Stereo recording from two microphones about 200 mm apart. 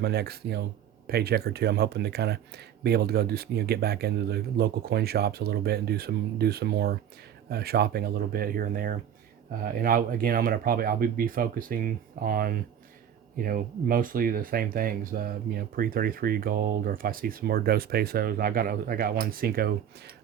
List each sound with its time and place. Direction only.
0.0 s speech: 55° right (ahead or behind)